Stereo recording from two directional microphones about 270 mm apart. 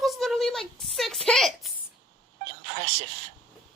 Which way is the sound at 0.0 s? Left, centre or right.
Centre.